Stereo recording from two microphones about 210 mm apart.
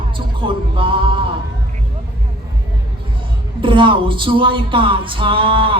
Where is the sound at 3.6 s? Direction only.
25° right (ahead or behind).